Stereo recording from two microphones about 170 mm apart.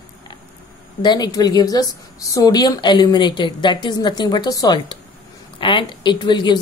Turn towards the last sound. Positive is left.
turn(degrees=25)  # may be behind; listen again after turning